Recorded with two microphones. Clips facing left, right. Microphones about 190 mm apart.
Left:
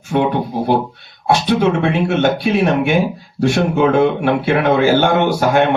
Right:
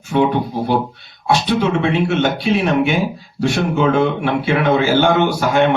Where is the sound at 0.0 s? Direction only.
55° left (ahead or behind).